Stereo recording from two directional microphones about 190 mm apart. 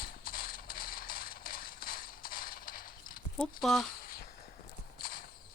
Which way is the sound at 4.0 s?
50° left (ahead or behind).